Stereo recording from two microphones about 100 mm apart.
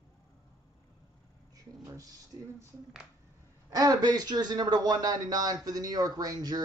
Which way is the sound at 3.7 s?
40° right (ahead or behind).